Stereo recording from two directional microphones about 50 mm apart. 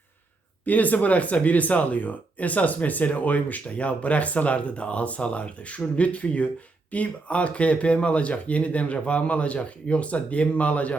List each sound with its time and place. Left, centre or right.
0.6 s speech: left